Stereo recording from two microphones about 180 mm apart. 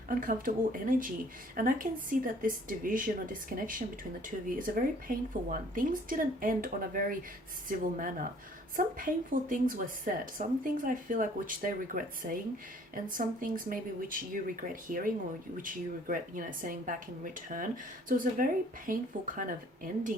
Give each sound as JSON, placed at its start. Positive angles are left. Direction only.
{"t": 0.1, "sound": "a woman's voice", "side_deg": -50}